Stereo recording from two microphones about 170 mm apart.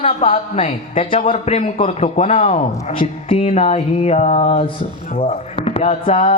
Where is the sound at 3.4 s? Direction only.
40° left (ahead or behind).